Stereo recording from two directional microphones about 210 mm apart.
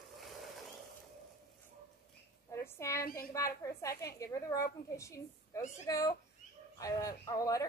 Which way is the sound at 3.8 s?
15° left (ahead or behind).